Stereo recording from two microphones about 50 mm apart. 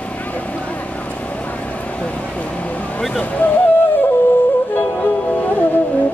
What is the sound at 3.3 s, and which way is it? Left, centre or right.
Music, left.